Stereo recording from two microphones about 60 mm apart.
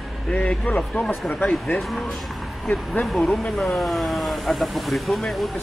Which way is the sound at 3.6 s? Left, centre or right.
Centre.